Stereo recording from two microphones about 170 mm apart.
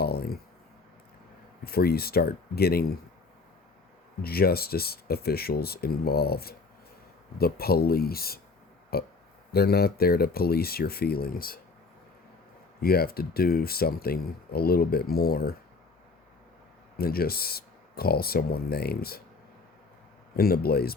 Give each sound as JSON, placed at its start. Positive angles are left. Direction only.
{"t": 0.0, "sound": "a sound", "side_deg": 65}
{"t": 1.6, "sound": "speech", "side_deg": 65}
{"t": 4.2, "sound": "speech", "side_deg": 65}
{"t": 12.8, "sound": "speech", "side_deg": 65}
{"t": 17.0, "sound": "speech", "side_deg": 65}
{"t": 20.3, "sound": "speech", "side_deg": 65}